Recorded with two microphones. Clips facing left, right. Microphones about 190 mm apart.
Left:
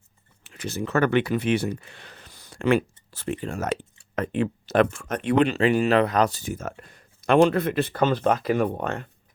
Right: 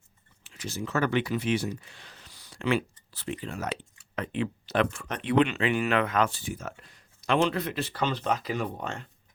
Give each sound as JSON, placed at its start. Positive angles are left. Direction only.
{"t": 0.4, "sound": "speech", "side_deg": 60}